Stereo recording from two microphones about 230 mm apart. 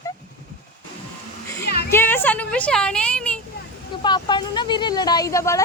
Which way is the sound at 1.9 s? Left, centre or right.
Centre.